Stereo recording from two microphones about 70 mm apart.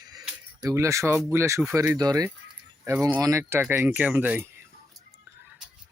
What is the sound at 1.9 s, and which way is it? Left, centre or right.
Speech, right.